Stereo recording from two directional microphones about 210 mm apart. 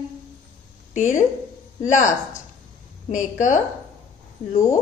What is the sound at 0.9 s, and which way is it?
A woman's voice, 35° left (ahead or behind).